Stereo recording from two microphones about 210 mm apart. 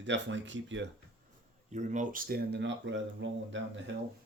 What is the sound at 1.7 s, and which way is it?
Speech, 35° right (ahead or behind).